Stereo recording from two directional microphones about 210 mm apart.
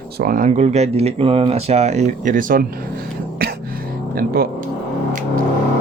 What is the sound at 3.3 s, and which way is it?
Music, 45° right (ahead or behind).